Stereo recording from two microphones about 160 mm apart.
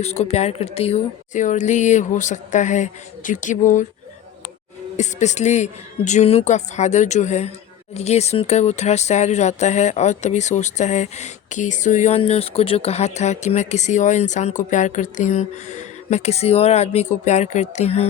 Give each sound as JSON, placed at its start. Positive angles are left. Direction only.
{"t": 0.0, "sound": "speech", "side_deg": 40}
{"t": 4.9, "sound": "speech", "side_deg": 45}